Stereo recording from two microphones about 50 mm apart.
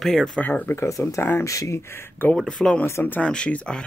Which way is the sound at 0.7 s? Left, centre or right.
Left.